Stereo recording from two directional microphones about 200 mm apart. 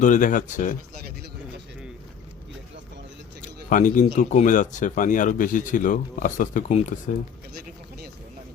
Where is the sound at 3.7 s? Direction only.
40° left (ahead or behind).